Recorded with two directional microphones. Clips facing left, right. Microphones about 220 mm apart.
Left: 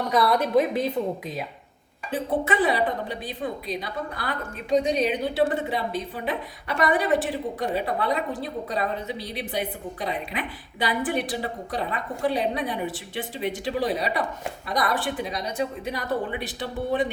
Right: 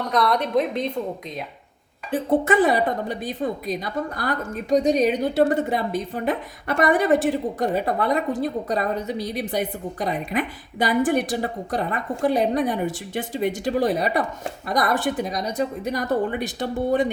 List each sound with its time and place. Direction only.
0.1 s a woman's voice: 5° left (ahead or behind)
2.1 s a woman's voice: 45° right (ahead or behind)